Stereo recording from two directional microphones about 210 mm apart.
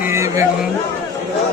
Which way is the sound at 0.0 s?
15° right (ahead or behind).